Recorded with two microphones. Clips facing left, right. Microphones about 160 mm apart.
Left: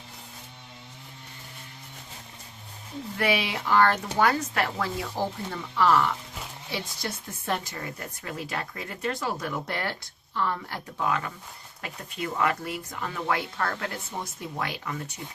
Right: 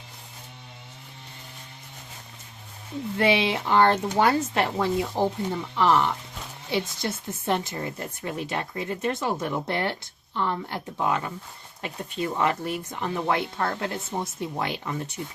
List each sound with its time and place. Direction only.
3.2 s speech: 25° right (ahead or behind)